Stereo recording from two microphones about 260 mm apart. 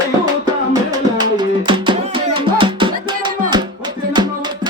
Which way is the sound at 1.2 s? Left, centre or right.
Centre.